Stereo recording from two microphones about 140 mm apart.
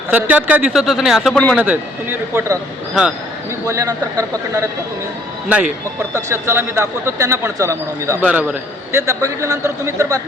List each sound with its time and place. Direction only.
0.1 s speech: 10° right (ahead or behind); by 1.5 s 5° left (ahead or behind)
1.5 s speech: 10° right (ahead or behind)
3.7 s speech: 25° right (ahead or behind)
5.5 s speech: 10° right (ahead or behind)
6.1 s speech: 20° right (ahead or behind)
8.2 s speech: 10° right (ahead or behind)
8.9 s speech: 20° right (ahead or behind)